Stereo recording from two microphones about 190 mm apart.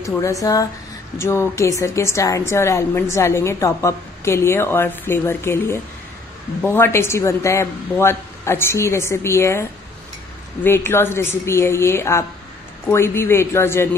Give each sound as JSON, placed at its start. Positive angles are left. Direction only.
{"t": 0.0, "sound": "a woman's voice", "side_deg": 15}